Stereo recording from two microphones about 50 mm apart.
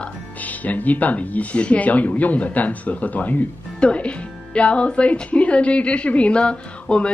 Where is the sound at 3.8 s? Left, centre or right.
Left.